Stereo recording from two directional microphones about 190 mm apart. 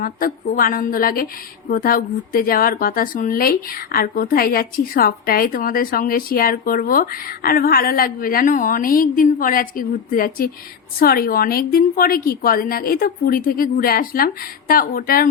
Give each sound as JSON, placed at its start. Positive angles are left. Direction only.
{"t": 0.0, "sound": "speech", "side_deg": 45}